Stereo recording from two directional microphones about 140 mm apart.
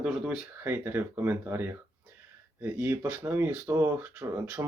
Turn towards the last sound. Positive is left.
turn(degrees=-10)  # may be behind; listen again after turning